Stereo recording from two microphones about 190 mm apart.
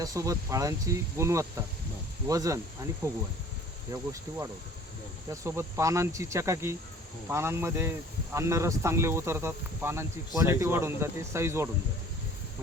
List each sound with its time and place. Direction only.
0.0 s speech: 20° right (ahead or behind)
4.3 s speech: 15° right (ahead or behind)